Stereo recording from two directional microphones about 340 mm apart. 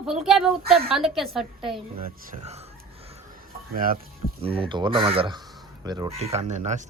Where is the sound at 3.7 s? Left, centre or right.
Right.